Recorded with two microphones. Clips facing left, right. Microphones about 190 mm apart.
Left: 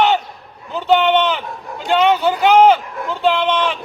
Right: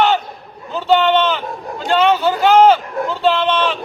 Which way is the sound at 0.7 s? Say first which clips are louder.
Even; 15° left (ahead or behind).